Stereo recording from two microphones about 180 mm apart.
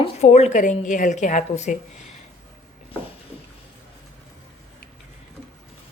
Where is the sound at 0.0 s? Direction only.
35° left (ahead or behind).